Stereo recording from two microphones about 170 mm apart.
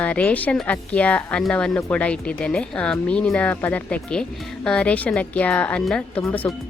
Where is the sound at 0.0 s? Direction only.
10° left (ahead or behind).